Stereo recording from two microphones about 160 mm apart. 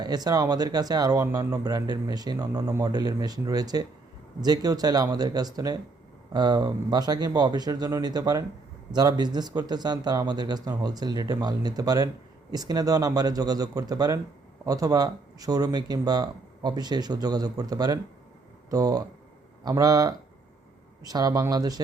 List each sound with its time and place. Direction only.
0.0 s speech: 25° right (ahead or behind)